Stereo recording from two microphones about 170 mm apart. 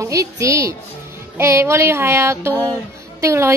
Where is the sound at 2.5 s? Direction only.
10° left (ahead or behind).